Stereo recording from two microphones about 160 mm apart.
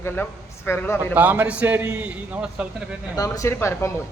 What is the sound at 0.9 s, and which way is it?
A man's voice, 10° right (ahead or behind).